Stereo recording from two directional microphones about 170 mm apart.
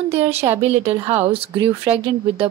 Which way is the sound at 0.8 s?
35° right (ahead or behind).